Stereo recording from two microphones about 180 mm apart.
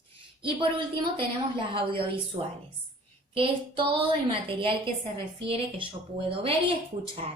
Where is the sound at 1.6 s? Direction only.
30° right (ahead or behind).